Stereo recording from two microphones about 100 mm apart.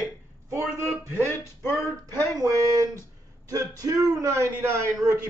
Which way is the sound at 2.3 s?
35° right (ahead or behind).